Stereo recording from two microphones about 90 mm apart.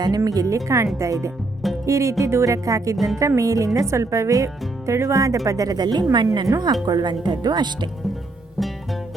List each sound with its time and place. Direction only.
0.3 s a woman's voice: 40° right (ahead or behind)
8.5 s music: centre (ahead or behind)